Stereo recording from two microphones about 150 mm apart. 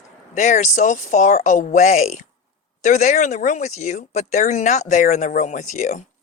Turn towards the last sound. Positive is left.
turn(degrees=55)  # may be behind; listen again after turning